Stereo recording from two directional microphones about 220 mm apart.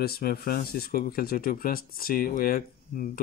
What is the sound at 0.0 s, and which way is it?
Speech, 45° left (ahead or behind).